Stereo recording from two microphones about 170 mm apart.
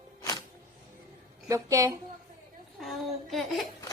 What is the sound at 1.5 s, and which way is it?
Speech, 20° right (ahead or behind).